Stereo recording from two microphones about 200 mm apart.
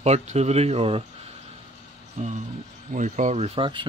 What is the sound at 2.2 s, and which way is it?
Speech, 35° right (ahead or behind).